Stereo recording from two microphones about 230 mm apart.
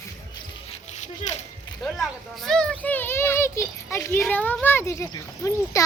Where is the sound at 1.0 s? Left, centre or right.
Left.